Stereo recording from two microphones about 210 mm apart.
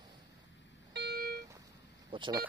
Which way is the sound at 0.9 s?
50° right (ahead or behind).